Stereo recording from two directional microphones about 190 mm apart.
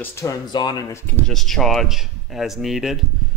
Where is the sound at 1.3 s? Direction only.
Centre (ahead or behind).